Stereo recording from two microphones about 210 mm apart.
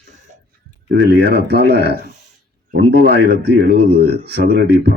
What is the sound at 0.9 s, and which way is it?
Speech, 50° right (ahead or behind).